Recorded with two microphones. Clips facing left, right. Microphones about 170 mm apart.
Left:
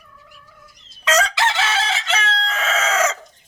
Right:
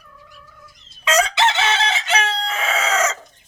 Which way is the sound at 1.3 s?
20° right (ahead or behind).